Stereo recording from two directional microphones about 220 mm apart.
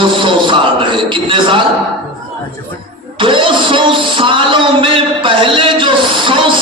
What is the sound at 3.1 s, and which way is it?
Music, 20° right (ahead or behind).